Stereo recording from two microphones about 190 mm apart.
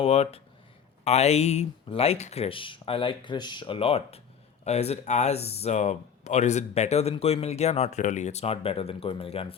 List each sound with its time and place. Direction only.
0.0 s speech: 30° left (ahead or behind)